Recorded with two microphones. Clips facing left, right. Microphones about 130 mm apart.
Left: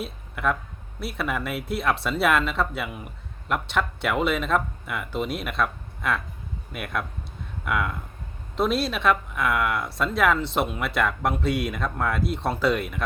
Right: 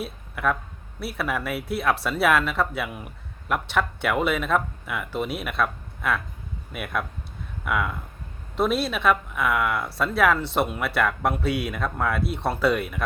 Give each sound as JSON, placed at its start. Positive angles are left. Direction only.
{"t": 0.0, "sound": "speech", "side_deg": 0}